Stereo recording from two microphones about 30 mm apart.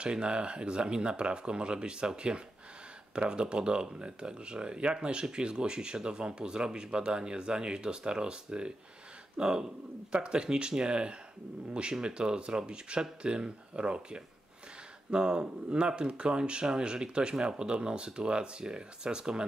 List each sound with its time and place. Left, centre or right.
0.0 s speech: right